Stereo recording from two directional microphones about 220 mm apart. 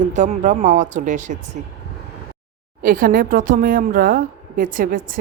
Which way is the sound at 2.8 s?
40° right (ahead or behind).